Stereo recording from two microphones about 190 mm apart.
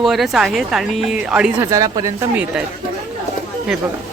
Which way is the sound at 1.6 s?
15° right (ahead or behind).